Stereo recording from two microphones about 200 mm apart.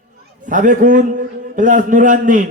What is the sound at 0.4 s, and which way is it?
A man's voice, 40° right (ahead or behind).